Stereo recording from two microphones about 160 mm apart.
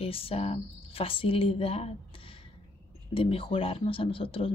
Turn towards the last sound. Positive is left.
turn(degrees=35)  # may be behind; listen again after turning